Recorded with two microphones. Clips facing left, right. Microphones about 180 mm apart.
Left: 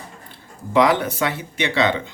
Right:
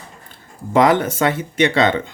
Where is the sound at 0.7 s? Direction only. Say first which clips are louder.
Right 3 dB; 50° right (ahead or behind).